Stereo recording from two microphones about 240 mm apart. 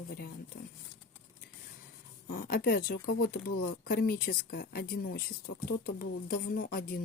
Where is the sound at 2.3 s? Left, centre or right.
Left.